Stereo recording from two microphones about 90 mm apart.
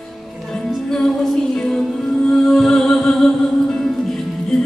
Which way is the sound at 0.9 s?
5° left (ahead or behind).